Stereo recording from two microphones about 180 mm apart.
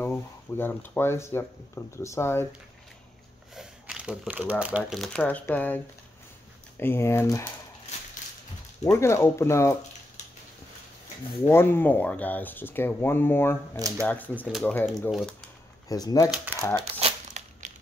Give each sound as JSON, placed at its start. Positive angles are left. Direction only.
{"t": 0.0, "sound": "speech", "side_deg": 10}
{"t": 3.5, "sound": "speech", "side_deg": -5}
{"t": 6.8, "sound": "speech", "side_deg": 15}
{"t": 8.8, "sound": "speech", "side_deg": 15}
{"t": 11.4, "sound": "speech", "side_deg": 10}
{"t": 13.7, "sound": "speech", "side_deg": -20}
{"t": 14.6, "sound": "speech", "side_deg": 10}
{"t": 14.9, "sound": "speech", "side_deg": 0}
{"t": 15.9, "sound": "speech", "side_deg": 20}
{"t": 16.8, "sound": "crumpling", "side_deg": -35}